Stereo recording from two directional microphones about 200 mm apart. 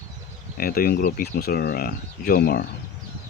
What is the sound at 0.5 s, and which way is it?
Speech, 50° left (ahead or behind).